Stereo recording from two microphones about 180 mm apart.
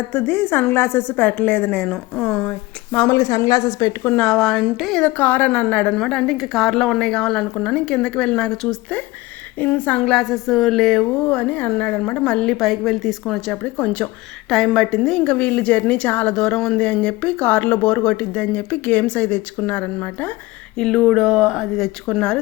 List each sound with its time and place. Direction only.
0.1 s a woman's voice: 10° left (ahead or behind)
3.2 s a woman's voice: 20° left (ahead or behind)
4.1 s a woman's voice: 5° left (ahead or behind)